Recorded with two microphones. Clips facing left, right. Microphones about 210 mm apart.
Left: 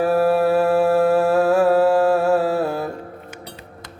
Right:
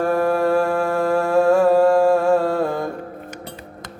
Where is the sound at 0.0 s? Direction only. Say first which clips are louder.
Left 2 dB; 5° left (ahead or behind).